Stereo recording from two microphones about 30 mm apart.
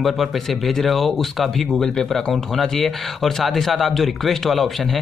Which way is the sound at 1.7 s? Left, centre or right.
Left.